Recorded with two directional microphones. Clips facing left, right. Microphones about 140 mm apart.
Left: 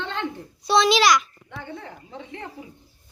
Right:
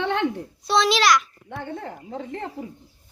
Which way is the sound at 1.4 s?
50° right (ahead or behind).